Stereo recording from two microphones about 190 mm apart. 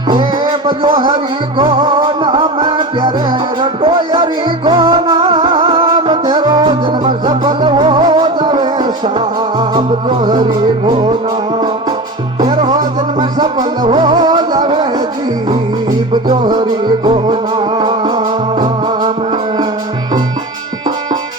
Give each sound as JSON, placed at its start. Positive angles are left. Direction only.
{"t": 0.1, "sound": "music", "side_deg": -25}
{"t": 12.4, "sound": "music", "side_deg": -35}
{"t": 12.7, "sound": "music", "side_deg": -20}
{"t": 16.6, "sound": "music", "side_deg": -35}